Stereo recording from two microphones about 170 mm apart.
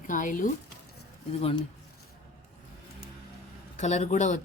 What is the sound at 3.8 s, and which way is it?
Speech, 45° left (ahead or behind).